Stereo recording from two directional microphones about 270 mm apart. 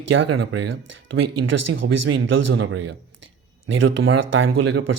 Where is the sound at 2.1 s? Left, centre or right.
Right.